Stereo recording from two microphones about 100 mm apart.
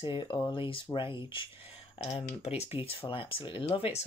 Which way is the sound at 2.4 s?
85° left.